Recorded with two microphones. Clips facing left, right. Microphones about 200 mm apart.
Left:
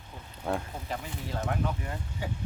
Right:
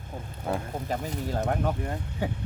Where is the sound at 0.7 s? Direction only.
40° right (ahead or behind).